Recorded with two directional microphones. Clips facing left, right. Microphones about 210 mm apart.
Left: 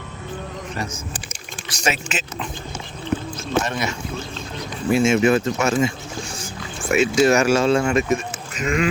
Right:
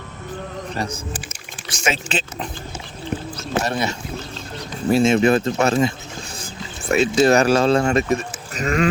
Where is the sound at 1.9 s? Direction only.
30° right (ahead or behind).